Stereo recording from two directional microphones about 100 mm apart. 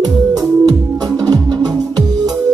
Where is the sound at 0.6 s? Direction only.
40° right (ahead or behind).